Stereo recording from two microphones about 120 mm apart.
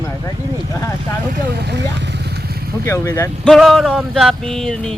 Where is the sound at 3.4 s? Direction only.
Centre (ahead or behind).